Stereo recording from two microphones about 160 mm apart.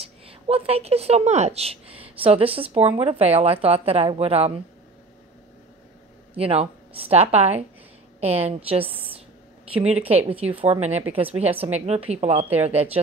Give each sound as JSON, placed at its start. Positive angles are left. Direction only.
{"t": 0.0, "sound": "a woman's voice", "side_deg": -35}
{"t": 6.3, "sound": "a woman's voice", "side_deg": -40}
{"t": 9.9, "sound": "a woman's voice", "side_deg": -10}
{"t": 10.2, "sound": "a woman's voice", "side_deg": -35}